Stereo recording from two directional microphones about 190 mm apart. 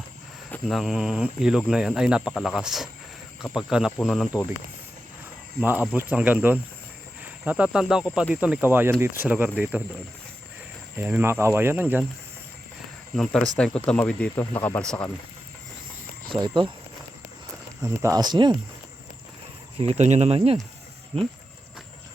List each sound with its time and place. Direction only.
0.5 s speech: centre (ahead or behind)
5.5 s speech: 10° right (ahead or behind)
10.9 s speech: 10° right (ahead or behind)
13.1 s speech: 5° left (ahead or behind)
16.3 s speech: 25° right (ahead or behind)
17.8 s speech: 15° right (ahead or behind)
19.8 s speech: 35° right (ahead or behind)